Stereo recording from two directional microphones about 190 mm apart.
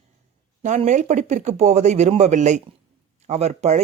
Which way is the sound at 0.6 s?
40° right (ahead or behind).